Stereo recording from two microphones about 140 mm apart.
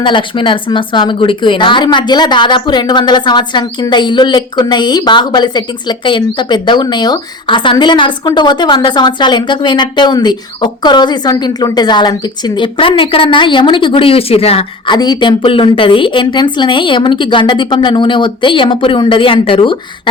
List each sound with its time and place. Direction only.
0.0 s speech: 35° left (ahead or behind)
14.9 s speech: 30° left (ahead or behind)